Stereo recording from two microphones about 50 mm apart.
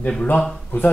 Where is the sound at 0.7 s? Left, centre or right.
Left.